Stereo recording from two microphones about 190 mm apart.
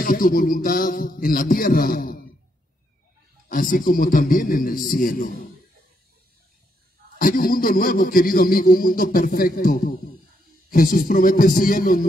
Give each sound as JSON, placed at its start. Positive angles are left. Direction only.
{"t": 0.0, "sound": "a man's voice", "side_deg": 45}
{"t": 3.4, "sound": "a man's voice", "side_deg": 45}
{"t": 7.2, "sound": "a man's voice", "side_deg": 50}